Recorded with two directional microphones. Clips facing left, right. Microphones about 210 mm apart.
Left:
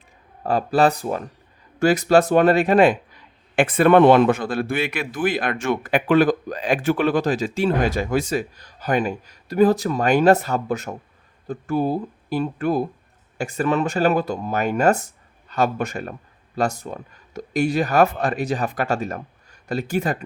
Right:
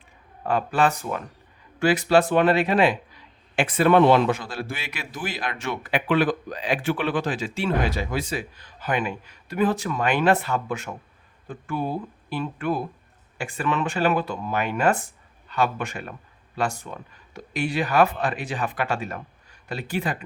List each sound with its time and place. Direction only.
0.4 s a man's voice: 35° left (ahead or behind)